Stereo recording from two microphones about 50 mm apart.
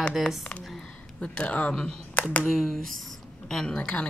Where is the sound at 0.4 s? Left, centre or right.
Left.